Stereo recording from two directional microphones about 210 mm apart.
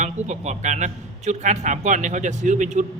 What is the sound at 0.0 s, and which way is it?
A man's voice, 35° right (ahead or behind).